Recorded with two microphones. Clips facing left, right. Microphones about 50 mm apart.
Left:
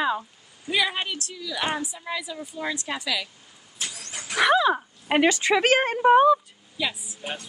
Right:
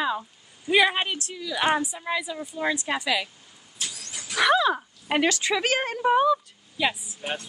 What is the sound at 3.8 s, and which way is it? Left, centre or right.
Vehicle, left.